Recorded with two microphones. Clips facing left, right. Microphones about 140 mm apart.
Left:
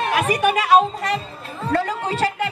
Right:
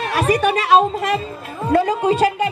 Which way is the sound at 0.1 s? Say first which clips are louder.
Right 5 dB; 35° right (ahead or behind).